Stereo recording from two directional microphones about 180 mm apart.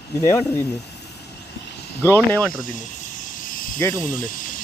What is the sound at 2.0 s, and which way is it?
Speech, 10° left (ahead or behind).